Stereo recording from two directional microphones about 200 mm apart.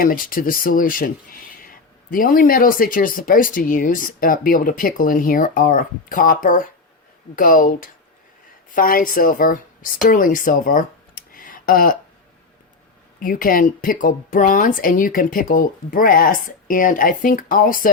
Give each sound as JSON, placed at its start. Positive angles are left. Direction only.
{"t": 0.0, "sound": "speech", "side_deg": 45}
{"t": 11.3, "sound": "tick", "side_deg": 45}
{"t": 13.1, "sound": "speech", "side_deg": 45}